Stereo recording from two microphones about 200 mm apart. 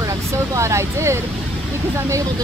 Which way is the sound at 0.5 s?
15° right (ahead or behind).